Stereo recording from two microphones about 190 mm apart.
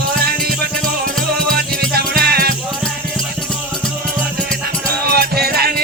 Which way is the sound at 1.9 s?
55° right (ahead or behind).